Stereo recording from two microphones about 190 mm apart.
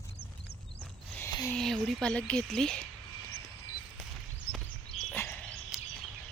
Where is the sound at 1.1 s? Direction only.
15° left (ahead or behind).